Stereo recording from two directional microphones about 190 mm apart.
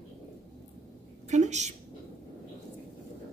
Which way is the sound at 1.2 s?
40° right (ahead or behind).